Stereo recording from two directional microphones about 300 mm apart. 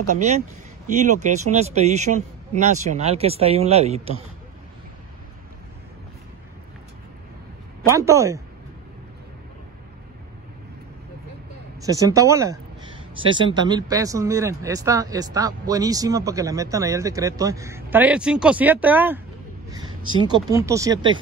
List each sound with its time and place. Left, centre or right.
0.1 s speech: right
7.9 s speech: centre
11.8 s speech: centre